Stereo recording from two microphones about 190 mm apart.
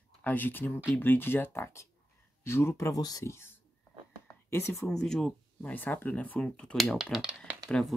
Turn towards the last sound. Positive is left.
turn(degrees=5)  # may be behind; listen again after turning